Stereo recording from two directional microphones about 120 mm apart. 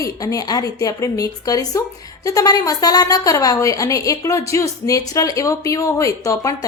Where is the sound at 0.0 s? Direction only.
30° left (ahead or behind).